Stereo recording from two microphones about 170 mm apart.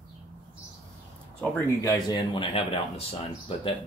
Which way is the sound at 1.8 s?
20° left (ahead or behind).